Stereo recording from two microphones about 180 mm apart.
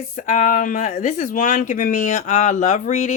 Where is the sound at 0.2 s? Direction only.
45° left (ahead or behind).